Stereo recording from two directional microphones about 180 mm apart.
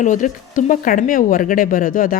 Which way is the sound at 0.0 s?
45° left (ahead or behind).